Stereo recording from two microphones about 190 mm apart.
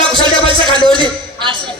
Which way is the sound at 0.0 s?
25° right (ahead or behind).